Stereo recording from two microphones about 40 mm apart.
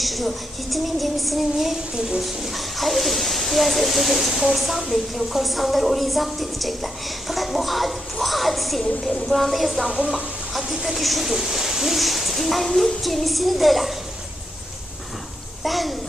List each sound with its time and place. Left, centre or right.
0.0 s speech: centre
2.0 s speech: centre
15.6 s speech: centre